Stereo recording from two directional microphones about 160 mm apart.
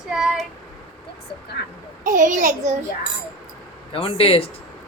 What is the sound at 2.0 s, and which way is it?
Speech, 55° right (ahead or behind).